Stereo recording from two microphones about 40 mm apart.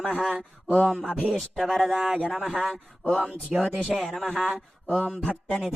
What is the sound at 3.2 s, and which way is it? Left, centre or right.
Speech, right.